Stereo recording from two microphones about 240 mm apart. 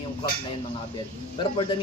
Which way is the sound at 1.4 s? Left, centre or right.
Left.